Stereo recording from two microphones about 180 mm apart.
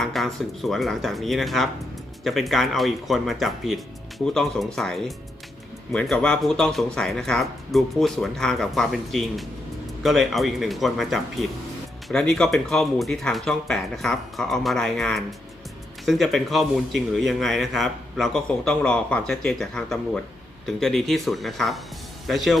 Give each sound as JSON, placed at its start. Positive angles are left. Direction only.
{"t": 0.0, "sound": "speech", "side_deg": 0}